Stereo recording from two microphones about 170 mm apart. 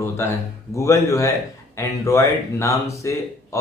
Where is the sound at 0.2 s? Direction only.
15° left (ahead or behind).